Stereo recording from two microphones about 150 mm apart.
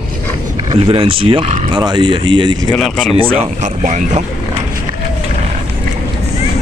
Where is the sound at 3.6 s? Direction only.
55° right (ahead or behind).